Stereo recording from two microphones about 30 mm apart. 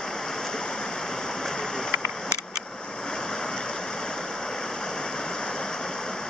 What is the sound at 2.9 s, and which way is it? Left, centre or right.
Waves, left.